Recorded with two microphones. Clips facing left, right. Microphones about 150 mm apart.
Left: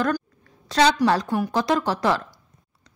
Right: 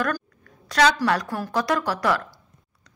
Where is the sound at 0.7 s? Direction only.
25° left (ahead or behind).